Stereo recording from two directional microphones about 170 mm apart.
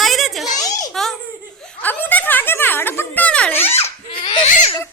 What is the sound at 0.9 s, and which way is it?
Laughter, centre (ahead or behind).